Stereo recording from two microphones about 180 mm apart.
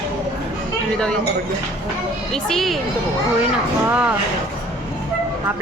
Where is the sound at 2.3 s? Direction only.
Centre (ahead or behind).